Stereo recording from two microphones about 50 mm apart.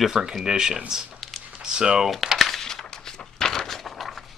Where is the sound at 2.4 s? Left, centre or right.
Centre.